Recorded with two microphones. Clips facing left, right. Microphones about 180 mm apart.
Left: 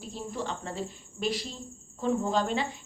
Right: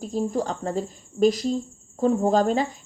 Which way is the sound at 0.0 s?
40° right (ahead or behind).